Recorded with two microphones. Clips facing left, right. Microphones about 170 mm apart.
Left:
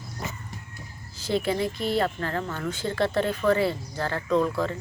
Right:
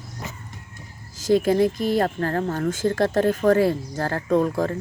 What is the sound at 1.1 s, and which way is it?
Speech, 45° right (ahead or behind).